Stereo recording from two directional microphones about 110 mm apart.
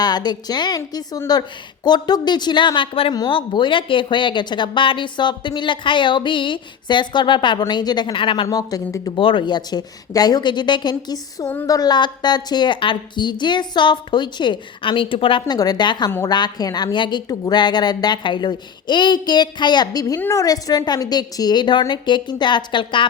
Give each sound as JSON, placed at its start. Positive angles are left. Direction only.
{"t": 0.0, "sound": "speech", "side_deg": 40}
{"t": 8.4, "sound": "speech", "side_deg": 35}
{"t": 9.1, "sound": "speech", "side_deg": 50}
{"t": 15.5, "sound": "speech", "side_deg": 35}
{"t": 20.1, "sound": "a woman's voice", "side_deg": 20}
{"t": 20.4, "sound": "speech", "side_deg": 35}